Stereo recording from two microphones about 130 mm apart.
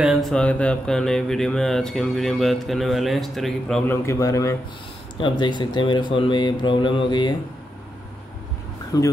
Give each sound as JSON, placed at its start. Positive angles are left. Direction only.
{"t": 0.0, "sound": "mantra", "side_deg": 0}
{"t": 3.8, "sound": "a man's voice", "side_deg": 20}
{"t": 5.1, "sound": "speech", "side_deg": 40}
{"t": 8.9, "sound": "a man's voice", "side_deg": 30}